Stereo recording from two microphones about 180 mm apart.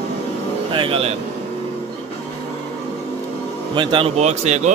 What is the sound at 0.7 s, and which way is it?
Speech, 30° right (ahead or behind).